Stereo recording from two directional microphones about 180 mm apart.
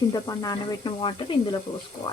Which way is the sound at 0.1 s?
20° left (ahead or behind).